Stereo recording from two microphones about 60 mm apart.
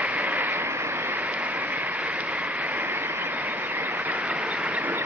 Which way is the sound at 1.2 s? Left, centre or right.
Right.